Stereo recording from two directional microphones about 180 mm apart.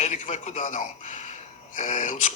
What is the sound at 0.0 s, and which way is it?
A man's voice, 40° left (ahead or behind).